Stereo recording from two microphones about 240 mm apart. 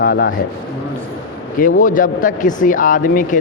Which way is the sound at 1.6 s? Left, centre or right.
Left.